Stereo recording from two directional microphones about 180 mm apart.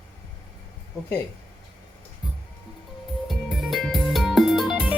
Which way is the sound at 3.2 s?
Centre (ahead or behind).